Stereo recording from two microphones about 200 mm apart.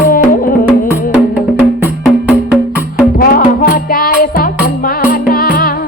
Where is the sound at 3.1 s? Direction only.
45° left (ahead or behind).